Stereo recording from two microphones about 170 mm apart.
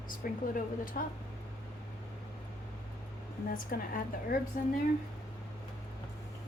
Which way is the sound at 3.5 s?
55° left (ahead or behind).